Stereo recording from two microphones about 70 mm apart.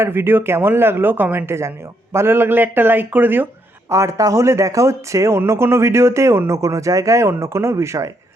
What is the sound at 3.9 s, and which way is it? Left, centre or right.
A man's voice, right.